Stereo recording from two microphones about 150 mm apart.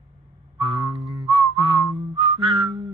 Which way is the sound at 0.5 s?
35° right (ahead or behind).